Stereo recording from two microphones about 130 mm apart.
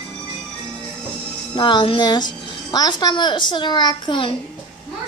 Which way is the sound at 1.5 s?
35° left (ahead or behind).